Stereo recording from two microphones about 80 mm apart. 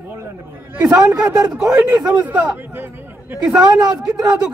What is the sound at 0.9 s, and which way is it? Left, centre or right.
Speech, right.